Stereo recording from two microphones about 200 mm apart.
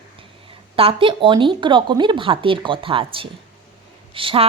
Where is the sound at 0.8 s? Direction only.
25° right (ahead or behind).